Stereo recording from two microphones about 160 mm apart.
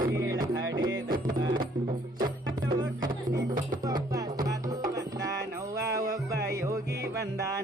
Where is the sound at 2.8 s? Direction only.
25° right (ahead or behind).